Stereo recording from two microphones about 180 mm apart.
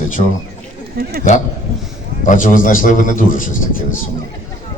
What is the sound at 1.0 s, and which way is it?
Speech, 60° right (ahead or behind).